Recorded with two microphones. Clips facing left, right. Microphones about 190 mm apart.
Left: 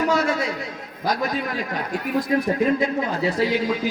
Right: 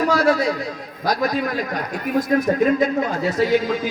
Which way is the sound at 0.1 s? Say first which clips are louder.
Right 4 dB; 35° right (ahead or behind).